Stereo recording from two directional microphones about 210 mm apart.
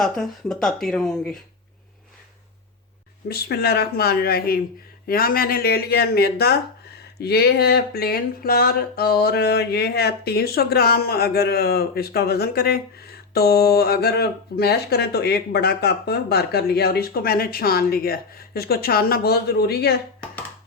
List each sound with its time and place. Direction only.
0.0 s speech: centre (ahead or behind)
3.2 s speech: 50° left (ahead or behind)